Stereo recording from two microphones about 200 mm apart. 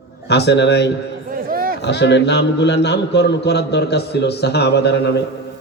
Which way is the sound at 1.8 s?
60° left (ahead or behind).